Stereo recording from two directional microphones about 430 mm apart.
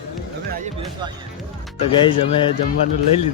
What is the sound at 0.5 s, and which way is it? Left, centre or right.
Speech, centre.